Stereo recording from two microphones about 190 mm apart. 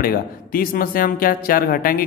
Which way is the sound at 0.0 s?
50° left (ahead or behind).